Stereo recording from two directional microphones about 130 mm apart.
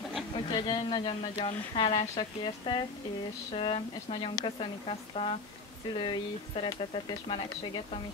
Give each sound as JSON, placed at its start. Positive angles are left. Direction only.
{"t": 0.5, "sound": "a woman's voice", "side_deg": 40}